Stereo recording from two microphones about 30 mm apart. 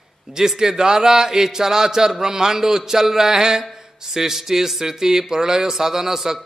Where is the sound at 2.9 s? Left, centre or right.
Centre.